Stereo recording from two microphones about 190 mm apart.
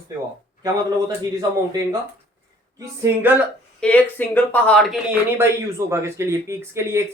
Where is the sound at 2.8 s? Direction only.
10° right (ahead or behind).